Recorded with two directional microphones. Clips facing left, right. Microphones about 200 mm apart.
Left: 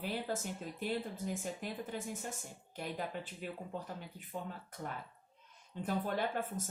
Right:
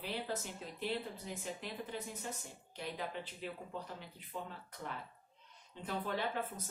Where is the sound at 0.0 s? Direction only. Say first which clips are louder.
Left 2 dB; 45° left (ahead or behind).